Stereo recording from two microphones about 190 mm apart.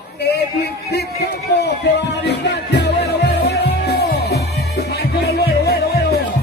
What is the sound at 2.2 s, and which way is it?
Music, 60° left (ahead or behind).